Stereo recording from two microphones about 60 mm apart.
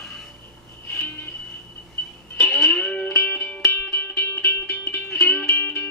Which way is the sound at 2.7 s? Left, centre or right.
Centre.